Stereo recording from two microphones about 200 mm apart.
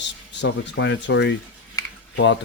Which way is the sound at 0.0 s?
60° left (ahead or behind).